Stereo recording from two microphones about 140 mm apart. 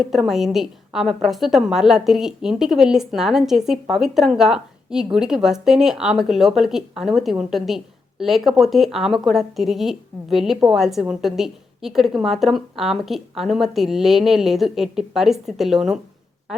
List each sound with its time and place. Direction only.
0.0 s a woman's voice: centre (ahead or behind)